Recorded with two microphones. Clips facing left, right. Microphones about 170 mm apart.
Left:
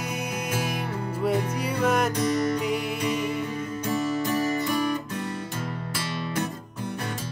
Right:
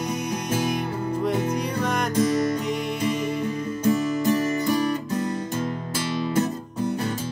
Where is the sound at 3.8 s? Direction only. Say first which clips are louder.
Right 5 dB; 35° right (ahead or behind).